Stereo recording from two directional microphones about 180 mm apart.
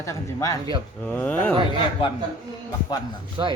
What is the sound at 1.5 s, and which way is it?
Speech, 25° right (ahead or behind).